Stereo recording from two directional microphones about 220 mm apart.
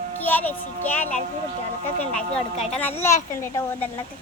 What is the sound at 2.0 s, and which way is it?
A child's voice, 5° left (ahead or behind).